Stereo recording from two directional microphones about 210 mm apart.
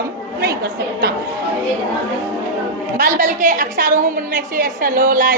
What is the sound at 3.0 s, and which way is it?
A woman's voice, 40° right (ahead or behind).